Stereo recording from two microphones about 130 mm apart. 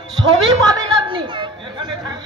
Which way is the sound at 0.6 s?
30° right (ahead or behind).